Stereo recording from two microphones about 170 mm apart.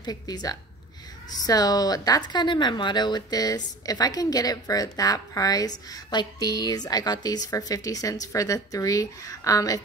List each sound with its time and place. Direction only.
0.0 s a woman's voice: 25° left (ahead or behind)